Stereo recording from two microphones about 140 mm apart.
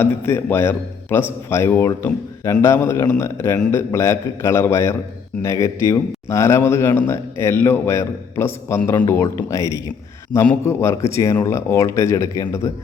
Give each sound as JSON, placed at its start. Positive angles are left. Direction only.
{"t": 0.0, "sound": "a man's voice", "side_deg": 15}